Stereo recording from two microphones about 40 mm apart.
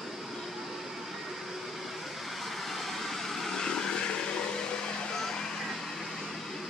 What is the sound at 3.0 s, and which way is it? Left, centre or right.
Vehicle, centre.